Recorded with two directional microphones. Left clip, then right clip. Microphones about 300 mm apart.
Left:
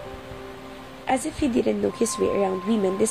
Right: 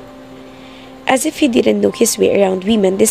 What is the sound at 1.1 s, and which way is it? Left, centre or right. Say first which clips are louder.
Speech: right 10 dB; right.